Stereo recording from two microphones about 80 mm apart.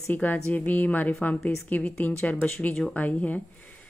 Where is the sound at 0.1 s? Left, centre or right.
Left.